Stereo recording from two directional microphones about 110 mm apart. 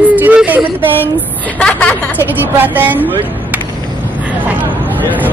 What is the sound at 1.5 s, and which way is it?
Speech, 10° left (ahead or behind).